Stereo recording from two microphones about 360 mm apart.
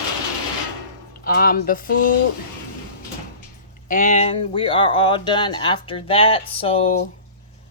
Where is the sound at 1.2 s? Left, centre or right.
Left.